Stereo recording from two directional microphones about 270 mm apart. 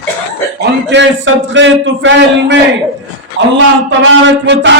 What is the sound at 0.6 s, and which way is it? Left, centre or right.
A man's voice, right.